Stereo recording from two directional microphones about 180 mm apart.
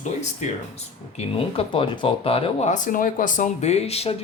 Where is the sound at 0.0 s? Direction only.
40° left (ahead or behind).